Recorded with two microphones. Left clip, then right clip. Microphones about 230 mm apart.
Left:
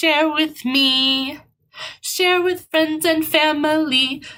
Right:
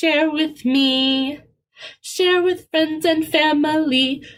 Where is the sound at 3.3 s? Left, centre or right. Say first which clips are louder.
Left 1 dB; left.